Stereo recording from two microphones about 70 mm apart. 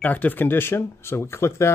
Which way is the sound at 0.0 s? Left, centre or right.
Left.